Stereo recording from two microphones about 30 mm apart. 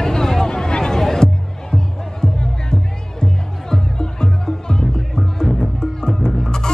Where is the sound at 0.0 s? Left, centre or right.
Centre.